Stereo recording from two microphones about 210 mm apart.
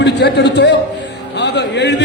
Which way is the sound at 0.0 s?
55° left (ahead or behind).